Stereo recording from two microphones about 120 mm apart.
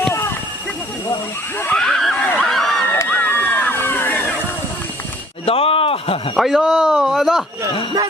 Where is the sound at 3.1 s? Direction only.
15° left (ahead or behind).